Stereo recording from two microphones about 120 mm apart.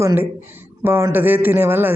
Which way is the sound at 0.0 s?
20° right (ahead or behind).